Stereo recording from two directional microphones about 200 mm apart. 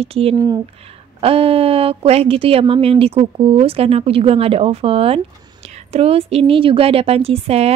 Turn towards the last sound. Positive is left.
turn(degrees=-30)  # may be behind; listen again after turning